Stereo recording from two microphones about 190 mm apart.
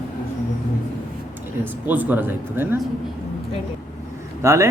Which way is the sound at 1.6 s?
10° right (ahead or behind).